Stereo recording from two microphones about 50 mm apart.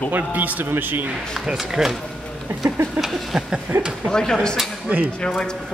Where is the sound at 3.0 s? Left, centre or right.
Centre.